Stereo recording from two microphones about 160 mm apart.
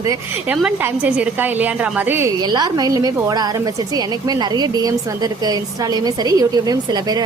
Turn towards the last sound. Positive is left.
turn(degrees=-25)  # may be behind; listen again after turning